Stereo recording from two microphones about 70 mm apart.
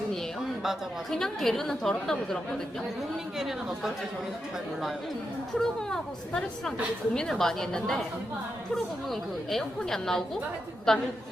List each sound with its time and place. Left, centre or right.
1.1 s a woman's voice: centre
3.3 s speech: centre
5.5 s a woman's voice: centre
9.5 s a woman's voice: centre